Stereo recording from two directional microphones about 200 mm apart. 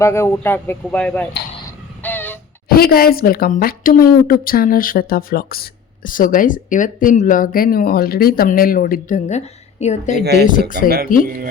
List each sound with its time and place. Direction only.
0.0 s speech: 15° left (ahead or behind)
2.0 s a sound: 10° left (ahead or behind)
2.6 s a woman's voice: 50° left (ahead or behind)
10.8 s speech: 50° right (ahead or behind)